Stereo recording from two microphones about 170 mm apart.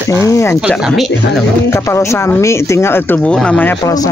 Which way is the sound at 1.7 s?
15° left (ahead or behind).